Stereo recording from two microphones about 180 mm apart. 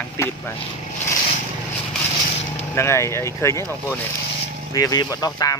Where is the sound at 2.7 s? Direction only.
15° left (ahead or behind).